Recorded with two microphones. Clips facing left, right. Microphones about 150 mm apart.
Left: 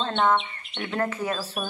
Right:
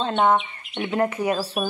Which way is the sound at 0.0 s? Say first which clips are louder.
Right 3 dB; 15° right (ahead or behind).